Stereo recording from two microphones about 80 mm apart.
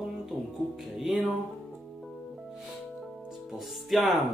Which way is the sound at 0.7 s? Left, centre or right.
Centre.